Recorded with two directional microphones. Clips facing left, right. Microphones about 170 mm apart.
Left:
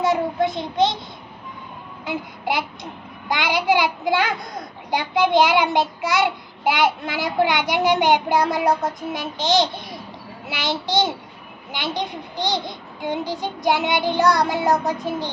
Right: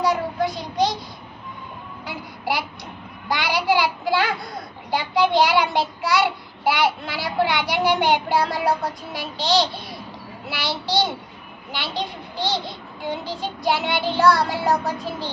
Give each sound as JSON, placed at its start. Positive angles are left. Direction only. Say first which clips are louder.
{"t": 0.0, "sound": "child singing", "louder": "left 2 dB", "side_deg": 25}
{"t": 2.0, "sound": "a child's voice", "louder": "left 2 dB", "side_deg": 20}